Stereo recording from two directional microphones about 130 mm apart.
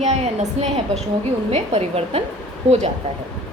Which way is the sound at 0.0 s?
60° right (ahead or behind).